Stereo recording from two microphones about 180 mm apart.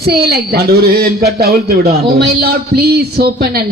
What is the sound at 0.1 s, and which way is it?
A man's voice, 60° right (ahead or behind).